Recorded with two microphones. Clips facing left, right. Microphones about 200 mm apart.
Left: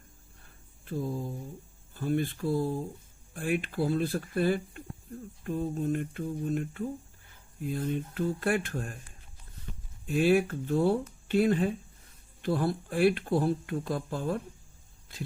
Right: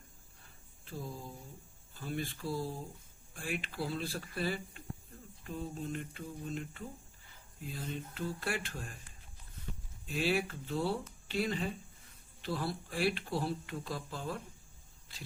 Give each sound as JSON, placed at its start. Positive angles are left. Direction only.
{"t": 0.9, "sound": "speech", "side_deg": 55}
{"t": 10.1, "sound": "speech", "side_deg": 50}